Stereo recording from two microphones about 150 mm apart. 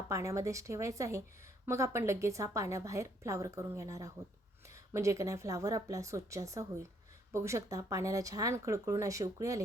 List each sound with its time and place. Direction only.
0.1 s a woman's voice: 20° right (ahead or behind)